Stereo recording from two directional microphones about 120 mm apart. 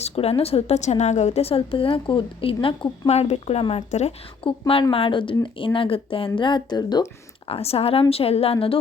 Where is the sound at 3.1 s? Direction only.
65° left (ahead or behind).